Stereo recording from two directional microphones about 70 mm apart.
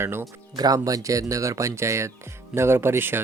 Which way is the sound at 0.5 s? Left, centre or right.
Right.